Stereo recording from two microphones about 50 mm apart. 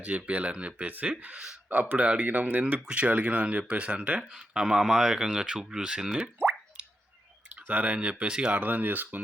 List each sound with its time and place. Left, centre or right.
0.0 s speech: right
2.9 s speech: right
4.2 s speech: centre
6.8 s plop: right
7.5 s speech: right
8.5 s speech: right